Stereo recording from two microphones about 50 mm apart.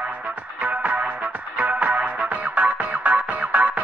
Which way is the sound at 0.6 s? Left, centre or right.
Right.